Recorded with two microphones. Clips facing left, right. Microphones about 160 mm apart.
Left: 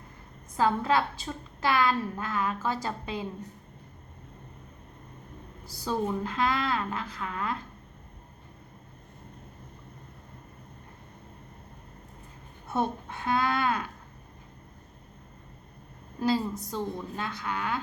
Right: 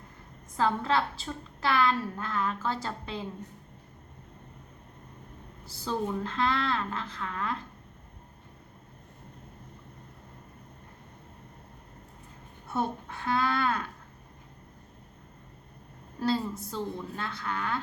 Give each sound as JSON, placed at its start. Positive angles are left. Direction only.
{"t": 0.5, "sound": "a woman's voice", "side_deg": 10}
{"t": 5.8, "sound": "a woman's voice", "side_deg": 10}
{"t": 12.7, "sound": "a woman's voice", "side_deg": 20}
{"t": 16.2, "sound": "a woman's voice", "side_deg": 15}